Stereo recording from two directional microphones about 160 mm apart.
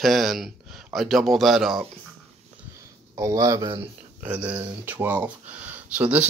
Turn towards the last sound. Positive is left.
turn(degrees=-10)  # may be behind; listen again after turning